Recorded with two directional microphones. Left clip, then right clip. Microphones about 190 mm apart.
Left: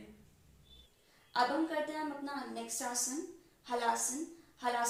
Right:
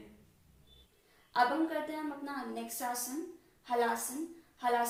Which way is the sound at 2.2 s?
5° right (ahead or behind).